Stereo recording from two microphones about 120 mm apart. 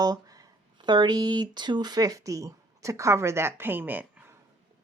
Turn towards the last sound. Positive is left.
turn(degrees=-15)  # may be behind; listen again after turning